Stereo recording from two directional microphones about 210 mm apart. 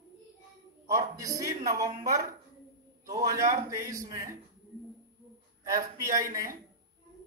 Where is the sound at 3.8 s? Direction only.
15° right (ahead or behind).